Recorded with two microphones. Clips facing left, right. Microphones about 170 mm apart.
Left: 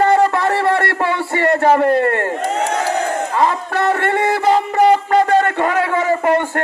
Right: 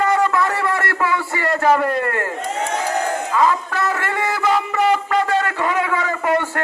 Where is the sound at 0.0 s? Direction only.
35° left (ahead or behind).